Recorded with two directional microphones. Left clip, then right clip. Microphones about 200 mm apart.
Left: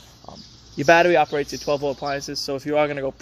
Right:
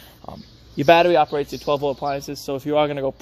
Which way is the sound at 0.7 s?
15° right (ahead or behind).